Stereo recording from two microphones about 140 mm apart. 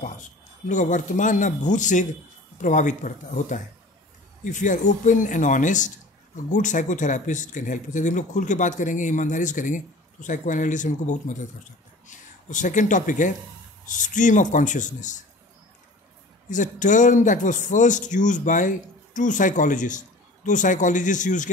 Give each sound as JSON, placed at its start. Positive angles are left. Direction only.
{"t": 0.7, "sound": "speech", "side_deg": 65}
{"t": 16.4, "sound": "speech", "side_deg": 65}